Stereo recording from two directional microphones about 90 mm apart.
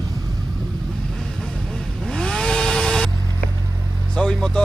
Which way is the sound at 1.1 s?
5° left (ahead or behind).